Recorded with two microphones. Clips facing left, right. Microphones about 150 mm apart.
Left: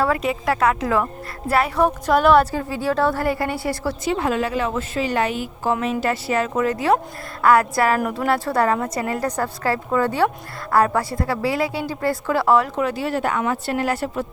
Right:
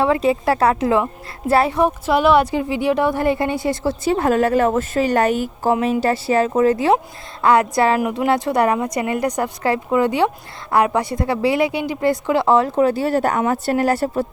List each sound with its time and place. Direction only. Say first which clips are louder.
0.0 s a woman's voice: right 4 dB; 25° right (ahead or behind)
1.8 s a woman's voice: right 1 dB; 10° right (ahead or behind)
4.0 s a woman's voice: right 5 dB; 40° right (ahead or behind)
5.8 s a woman's voice: right 4 dB; 35° right (ahead or behind)